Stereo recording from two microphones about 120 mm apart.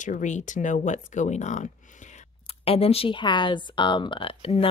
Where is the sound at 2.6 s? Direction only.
55° left (ahead or behind).